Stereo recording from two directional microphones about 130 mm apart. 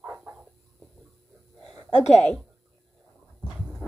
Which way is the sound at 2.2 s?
5° left (ahead or behind).